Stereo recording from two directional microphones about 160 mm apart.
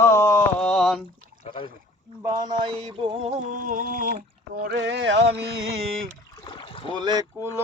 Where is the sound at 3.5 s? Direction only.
55° right (ahead or behind).